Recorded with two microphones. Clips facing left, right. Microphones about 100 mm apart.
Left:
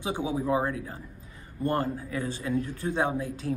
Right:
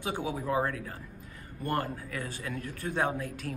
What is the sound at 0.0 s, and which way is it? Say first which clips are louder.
Speech: left 4 dB; 20° left (ahead or behind).